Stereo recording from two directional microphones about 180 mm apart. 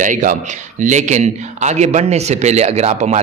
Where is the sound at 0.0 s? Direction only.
45° right (ahead or behind).